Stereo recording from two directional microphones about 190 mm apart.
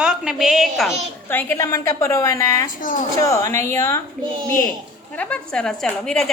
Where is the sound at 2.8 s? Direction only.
45° left (ahead or behind).